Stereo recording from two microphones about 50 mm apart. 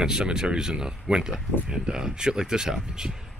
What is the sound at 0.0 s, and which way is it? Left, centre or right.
Speech, centre.